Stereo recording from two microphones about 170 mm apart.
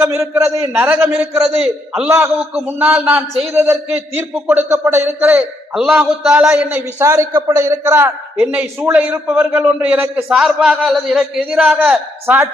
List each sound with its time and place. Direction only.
0.0 s a man's voice: 15° right (ahead or behind)